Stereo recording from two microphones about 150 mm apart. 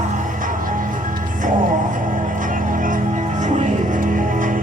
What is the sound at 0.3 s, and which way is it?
Music, 65° right (ahead or behind).